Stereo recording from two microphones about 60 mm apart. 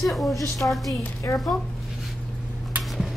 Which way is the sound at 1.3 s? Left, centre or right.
Left.